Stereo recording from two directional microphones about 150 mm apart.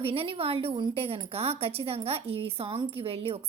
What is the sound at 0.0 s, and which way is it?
A woman's voice, 40° right (ahead or behind).